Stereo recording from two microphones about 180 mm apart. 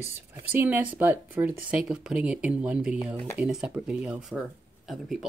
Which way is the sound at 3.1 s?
15° left (ahead or behind).